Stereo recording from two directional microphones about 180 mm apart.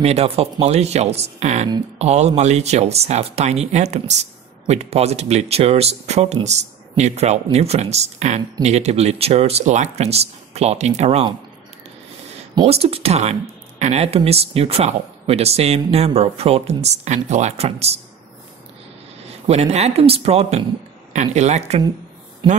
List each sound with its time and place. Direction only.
0.0 s speech: 35° right (ahead or behind)
12.5 s speech: 35° right (ahead or behind)
19.4 s speech: 35° right (ahead or behind)
22.4 s a man's voice: 25° right (ahead or behind)